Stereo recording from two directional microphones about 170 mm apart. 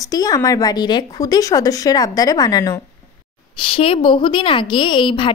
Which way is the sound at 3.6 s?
35° left (ahead or behind).